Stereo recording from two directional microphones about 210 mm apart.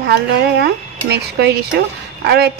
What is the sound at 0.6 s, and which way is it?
A woman's voice, 50° right (ahead or behind).